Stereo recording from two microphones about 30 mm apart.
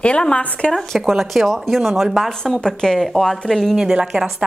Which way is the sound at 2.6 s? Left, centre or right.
Left.